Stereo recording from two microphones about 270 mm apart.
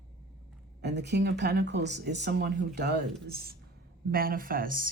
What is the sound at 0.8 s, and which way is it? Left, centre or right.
A man's voice, right.